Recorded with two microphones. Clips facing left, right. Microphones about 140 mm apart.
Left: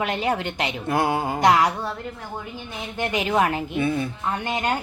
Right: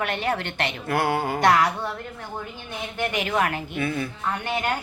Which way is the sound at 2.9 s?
25° left (ahead or behind).